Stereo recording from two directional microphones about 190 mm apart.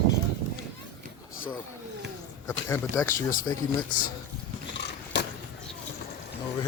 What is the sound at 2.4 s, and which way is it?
Speech, 15° left (ahead or behind).